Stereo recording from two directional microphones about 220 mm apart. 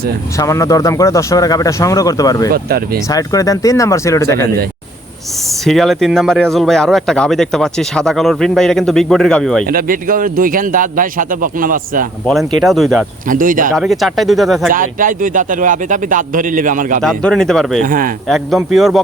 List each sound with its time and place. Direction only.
0.3 s speech: 15° left (ahead or behind)
2.5 s speech: 45° right (ahead or behind)
3.1 s speech: 15° left (ahead or behind)
5.6 s speech: centre (ahead or behind)
9.6 s a man's voice: 40° right (ahead or behind)
12.2 s speech: centre (ahead or behind)
13.2 s a man's voice: 40° right (ahead or behind)
13.7 s speech: centre (ahead or behind)
14.7 s a man's voice: 40° right (ahead or behind)
17.0 s speech: centre (ahead or behind)
17.8 s a man's voice: 40° right (ahead or behind)
18.3 s speech: centre (ahead or behind)